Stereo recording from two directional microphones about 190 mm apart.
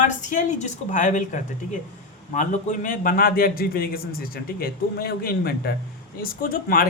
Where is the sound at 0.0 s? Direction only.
40° left (ahead or behind).